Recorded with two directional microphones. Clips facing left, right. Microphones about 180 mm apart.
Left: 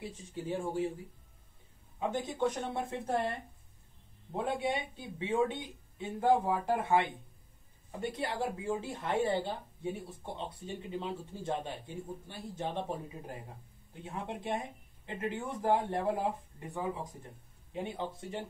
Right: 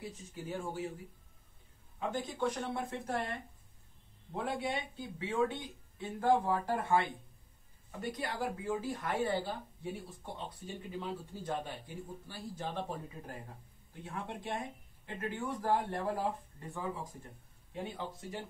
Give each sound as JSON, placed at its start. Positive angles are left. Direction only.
{"t": 0.0, "sound": "speech", "side_deg": 30}
{"t": 2.0, "sound": "speech", "side_deg": 20}
{"t": 4.3, "sound": "speech", "side_deg": 20}